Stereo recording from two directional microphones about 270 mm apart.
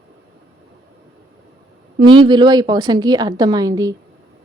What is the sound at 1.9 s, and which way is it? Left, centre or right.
Speech, centre.